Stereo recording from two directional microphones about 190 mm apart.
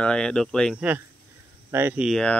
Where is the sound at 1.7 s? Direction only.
10° right (ahead or behind).